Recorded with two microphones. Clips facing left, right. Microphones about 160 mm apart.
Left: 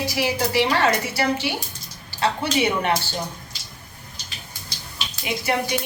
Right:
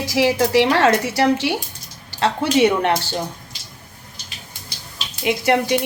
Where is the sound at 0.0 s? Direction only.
90° right.